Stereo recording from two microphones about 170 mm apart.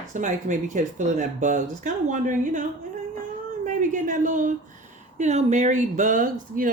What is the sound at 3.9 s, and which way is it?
A woman's voice, 50° right (ahead or behind).